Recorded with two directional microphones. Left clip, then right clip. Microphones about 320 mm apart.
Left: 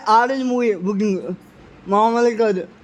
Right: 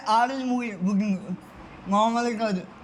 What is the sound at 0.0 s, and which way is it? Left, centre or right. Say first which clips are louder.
A man's voice: left 7 dB; centre.